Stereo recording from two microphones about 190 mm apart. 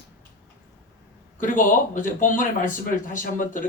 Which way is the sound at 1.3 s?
45° left (ahead or behind).